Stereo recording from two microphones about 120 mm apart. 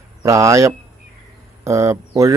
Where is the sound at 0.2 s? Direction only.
25° right (ahead or behind).